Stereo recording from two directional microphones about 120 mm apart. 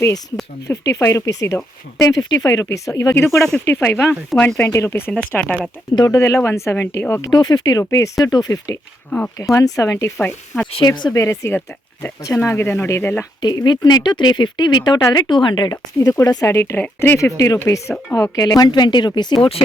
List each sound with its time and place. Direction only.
0.0 s speech: 30° left (ahead or behind); by 5.5 s 10° left (ahead or behind)
6.1 s speech: 25° left (ahead or behind)
7.3 s speech: 35° left (ahead or behind)
9.0 s speech: 10° left (ahead or behind)
9.4 s speech: 25° left (ahead or behind)
10.8 s speech: 35° left (ahead or behind); by 13.2 s 15° left (ahead or behind)
13.4 s speech: 35° left (ahead or behind)